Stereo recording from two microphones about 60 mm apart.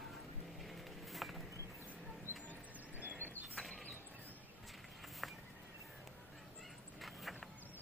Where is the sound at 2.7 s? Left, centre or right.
Right.